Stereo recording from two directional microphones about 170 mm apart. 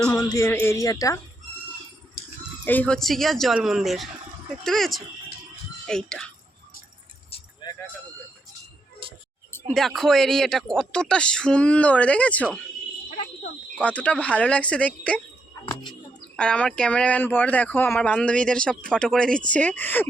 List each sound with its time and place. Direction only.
0.2 s speech: 20° left (ahead or behind)
2.6 s speech: 10° left (ahead or behind)
7.6 s a sound: 25° left (ahead or behind)
9.0 s a sound: 30° right (ahead or behind)
9.7 s speech: centre (ahead or behind)
13.1 s fire alarm: 45° left (ahead or behind)
13.7 s speech: 10° left (ahead or behind)
15.7 s bird: 25° left (ahead or behind)
16.4 s speech: 5° left (ahead or behind)